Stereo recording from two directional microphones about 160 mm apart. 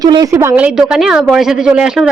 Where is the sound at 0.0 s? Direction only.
25° right (ahead or behind).